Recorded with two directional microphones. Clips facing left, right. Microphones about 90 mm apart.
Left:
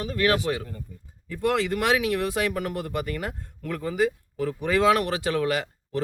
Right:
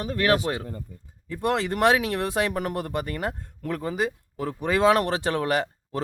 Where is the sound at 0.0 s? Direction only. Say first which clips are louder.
Right 1 dB; 30° right (ahead or behind).